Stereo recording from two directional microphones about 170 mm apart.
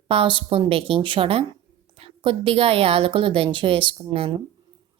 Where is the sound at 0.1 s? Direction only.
30° right (ahead or behind).